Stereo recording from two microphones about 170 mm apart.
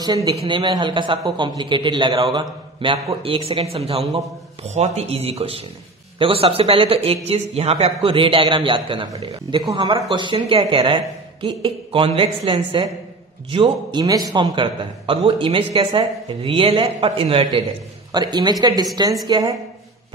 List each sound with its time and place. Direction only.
0.0 s a man's voice: 25° right (ahead or behind)